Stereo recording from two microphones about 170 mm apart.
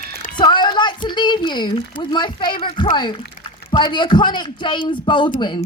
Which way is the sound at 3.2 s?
65° left (ahead or behind).